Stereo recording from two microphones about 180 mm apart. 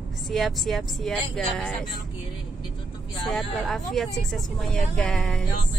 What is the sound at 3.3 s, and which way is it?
Speech, centre (ahead or behind).